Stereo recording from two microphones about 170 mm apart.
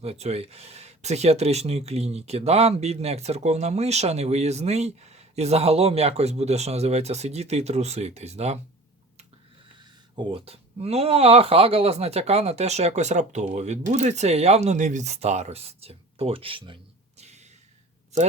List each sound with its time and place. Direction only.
0.0 s speech: 40° right (ahead or behind)
10.2 s speech: 30° right (ahead or behind)
17.2 s a sound: 40° right (ahead or behind)